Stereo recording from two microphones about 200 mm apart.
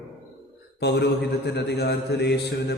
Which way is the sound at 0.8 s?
60° left (ahead or behind).